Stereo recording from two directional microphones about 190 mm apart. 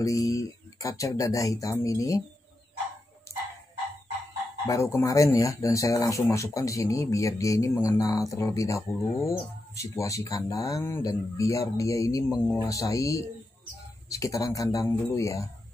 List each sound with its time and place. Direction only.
0.0 s speech: 15° left (ahead or behind)
4.6 s speech: 15° left (ahead or behind)